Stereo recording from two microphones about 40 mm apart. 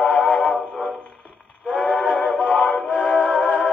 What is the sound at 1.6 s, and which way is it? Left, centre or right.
Train, left.